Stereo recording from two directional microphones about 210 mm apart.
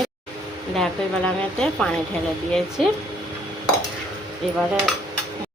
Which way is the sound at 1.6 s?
5° left (ahead or behind).